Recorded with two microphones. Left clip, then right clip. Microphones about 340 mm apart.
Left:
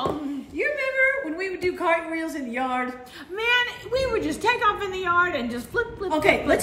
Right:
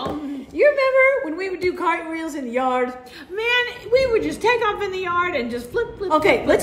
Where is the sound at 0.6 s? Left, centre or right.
Centre.